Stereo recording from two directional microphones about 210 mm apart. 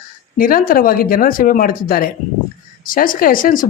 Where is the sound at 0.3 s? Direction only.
40° left (ahead or behind).